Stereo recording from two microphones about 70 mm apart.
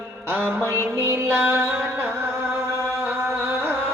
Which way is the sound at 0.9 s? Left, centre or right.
Right.